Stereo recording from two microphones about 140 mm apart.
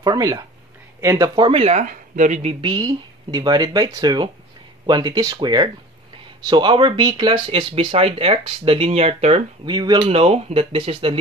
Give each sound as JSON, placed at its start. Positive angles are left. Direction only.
{"t": 0.0, "sound": "speech", "side_deg": -25}
{"t": 2.6, "sound": "speech", "side_deg": -35}
{"t": 9.7, "sound": "speech", "side_deg": -30}
{"t": 10.1, "sound": "speech", "side_deg": -45}